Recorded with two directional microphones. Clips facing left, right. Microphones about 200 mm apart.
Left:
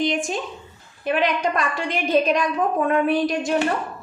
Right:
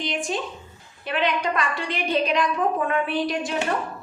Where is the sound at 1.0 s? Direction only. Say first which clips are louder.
Left 3 dB; 45° left (ahead or behind).